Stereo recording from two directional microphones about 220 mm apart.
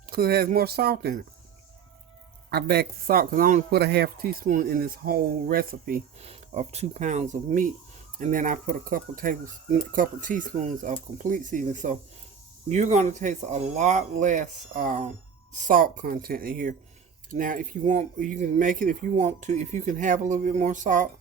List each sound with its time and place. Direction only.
0.1 s a man's voice: 40° right (ahead or behind)
2.5 s a man's voice: 45° right (ahead or behind)
6.1 s speech: 30° right (ahead or behind)